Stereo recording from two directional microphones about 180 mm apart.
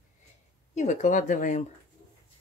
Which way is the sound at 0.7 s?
45° left (ahead or behind).